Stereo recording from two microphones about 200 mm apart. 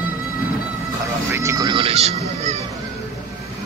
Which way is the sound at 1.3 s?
15° right (ahead or behind).